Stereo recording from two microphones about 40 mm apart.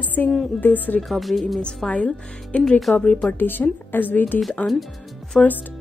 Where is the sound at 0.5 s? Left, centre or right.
Left.